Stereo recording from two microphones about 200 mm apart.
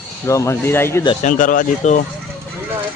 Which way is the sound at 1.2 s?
40° left (ahead or behind).